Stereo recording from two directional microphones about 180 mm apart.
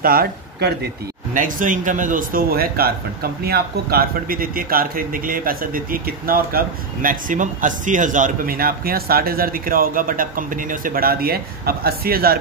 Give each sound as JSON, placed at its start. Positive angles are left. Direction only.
{"t": 0.0, "sound": "speech", "side_deg": -55}
{"t": 1.3, "sound": "a man's voice", "side_deg": -45}